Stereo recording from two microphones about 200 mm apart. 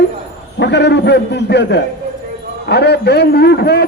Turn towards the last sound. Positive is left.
turn(degrees=55)  # may be behind; listen again after turning